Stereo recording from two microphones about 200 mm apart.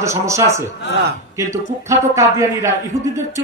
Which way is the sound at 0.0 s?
15° right (ahead or behind).